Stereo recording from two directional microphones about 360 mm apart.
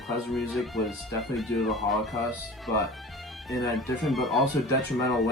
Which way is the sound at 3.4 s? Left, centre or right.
Centre.